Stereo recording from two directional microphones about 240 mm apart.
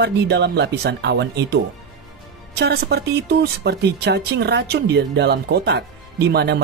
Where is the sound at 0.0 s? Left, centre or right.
Right.